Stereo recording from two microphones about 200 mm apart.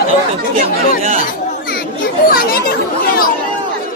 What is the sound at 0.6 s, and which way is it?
Speech, 30° right (ahead or behind).